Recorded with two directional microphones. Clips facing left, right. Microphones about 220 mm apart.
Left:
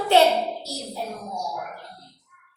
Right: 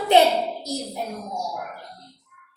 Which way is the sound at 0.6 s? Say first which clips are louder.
Right 4 dB; 15° right (ahead or behind).